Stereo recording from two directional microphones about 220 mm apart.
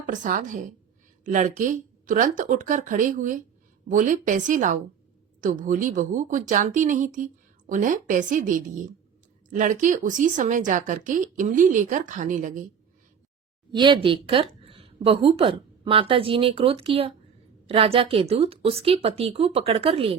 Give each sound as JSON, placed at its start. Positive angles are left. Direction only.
{"t": 0.0, "sound": "a woman's voice", "side_deg": -35}
{"t": 13.7, "sound": "a woman's voice", "side_deg": -20}